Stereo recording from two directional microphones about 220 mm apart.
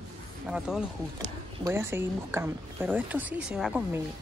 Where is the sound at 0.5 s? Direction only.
5° right (ahead or behind).